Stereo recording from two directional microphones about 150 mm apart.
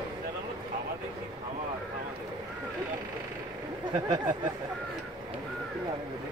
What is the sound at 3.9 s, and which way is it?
Speech, 30° right (ahead or behind).